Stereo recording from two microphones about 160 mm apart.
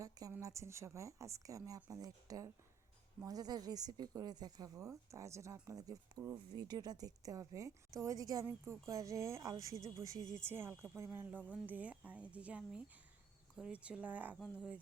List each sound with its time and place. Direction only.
0.0 s speech: 20° right (ahead or behind)
14.3 s speech: centre (ahead or behind)